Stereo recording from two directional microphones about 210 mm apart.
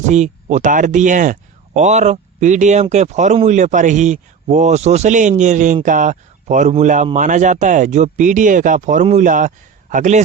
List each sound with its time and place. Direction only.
0.1 s speech: 35° right (ahead or behind)